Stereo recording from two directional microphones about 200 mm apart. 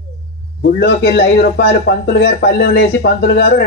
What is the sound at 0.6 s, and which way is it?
A man's voice, 55° left (ahead or behind).